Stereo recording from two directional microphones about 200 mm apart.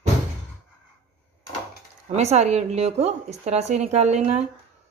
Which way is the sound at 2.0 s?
35° right (ahead or behind).